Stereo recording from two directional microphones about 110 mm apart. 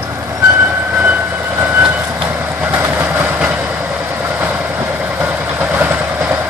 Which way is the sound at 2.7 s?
20° right (ahead or behind).